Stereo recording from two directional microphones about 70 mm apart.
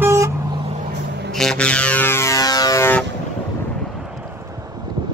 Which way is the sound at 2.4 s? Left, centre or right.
Left.